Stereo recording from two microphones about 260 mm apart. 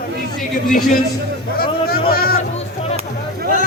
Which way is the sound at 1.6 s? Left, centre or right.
Left.